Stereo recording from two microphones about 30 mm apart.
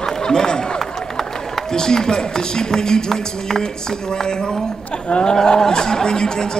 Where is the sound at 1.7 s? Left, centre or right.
Left.